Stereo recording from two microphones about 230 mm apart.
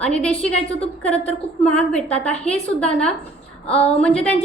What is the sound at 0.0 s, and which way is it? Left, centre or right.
A woman's voice, centre.